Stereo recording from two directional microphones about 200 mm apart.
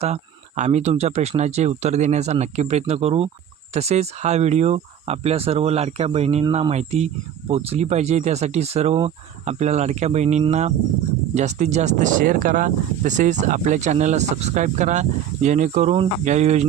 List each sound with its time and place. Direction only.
0.0 s speech: 35° right (ahead or behind)